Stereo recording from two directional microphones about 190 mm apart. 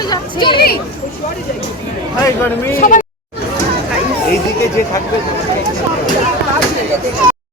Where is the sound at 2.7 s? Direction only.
45° left (ahead or behind).